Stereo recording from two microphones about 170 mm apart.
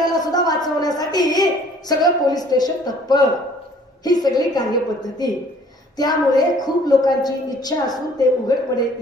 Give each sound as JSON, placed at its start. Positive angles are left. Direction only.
{"t": 0.0, "sound": "a sound", "side_deg": 25}
{"t": 4.0, "sound": "a woman's voice", "side_deg": 25}
{"t": 5.9, "sound": "a woman's voice", "side_deg": 25}